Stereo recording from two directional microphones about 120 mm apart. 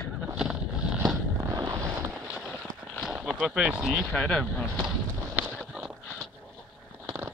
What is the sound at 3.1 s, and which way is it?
Speech, 10° right (ahead or behind).